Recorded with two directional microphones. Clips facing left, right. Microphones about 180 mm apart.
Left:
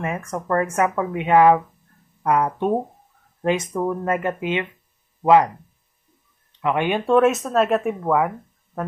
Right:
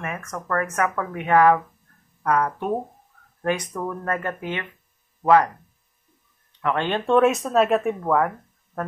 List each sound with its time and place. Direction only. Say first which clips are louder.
0.0 s speech: left 5 dB; 30° left (ahead or behind)
6.6 s speech: left 3 dB; 15° left (ahead or behind)
7.1 s speech: left 1 dB; centre (ahead or behind)